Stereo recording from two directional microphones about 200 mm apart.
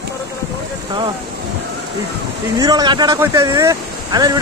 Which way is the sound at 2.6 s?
20° right (ahead or behind).